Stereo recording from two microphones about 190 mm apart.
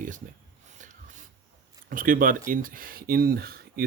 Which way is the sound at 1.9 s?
45° right (ahead or behind).